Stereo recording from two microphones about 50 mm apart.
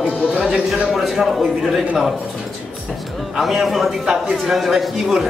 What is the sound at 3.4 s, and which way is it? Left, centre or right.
A man's voice, centre.